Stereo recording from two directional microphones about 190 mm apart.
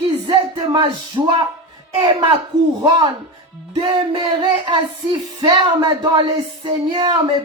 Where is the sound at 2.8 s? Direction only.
25° right (ahead or behind).